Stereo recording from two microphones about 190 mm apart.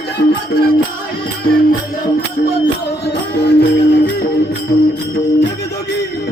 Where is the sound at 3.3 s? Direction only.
60° left (ahead or behind).